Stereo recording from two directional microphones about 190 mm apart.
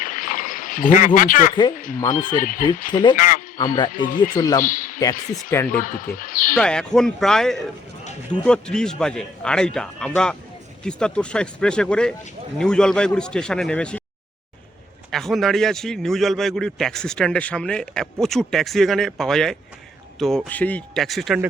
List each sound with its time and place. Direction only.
0.0 s a sound: 45° left (ahead or behind)
1.7 s speech: 45° left (ahead or behind)
2.9 s speech: 25° left (ahead or behind)
3.2 s speech: 45° left (ahead or behind)
4.4 s speech: 20° left (ahead or behind)
4.6 s a man's voice: 45° left (ahead or behind)
4.9 s speech: 20° left (ahead or behind)
5.7 s speech: 45° left (ahead or behind)
6.6 s speech: 5° left (ahead or behind)
15.1 s speech: centre (ahead or behind)